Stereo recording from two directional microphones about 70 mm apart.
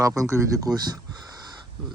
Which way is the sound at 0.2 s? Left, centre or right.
Right.